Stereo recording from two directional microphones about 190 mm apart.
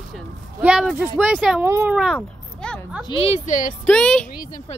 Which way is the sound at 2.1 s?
5° left (ahead or behind).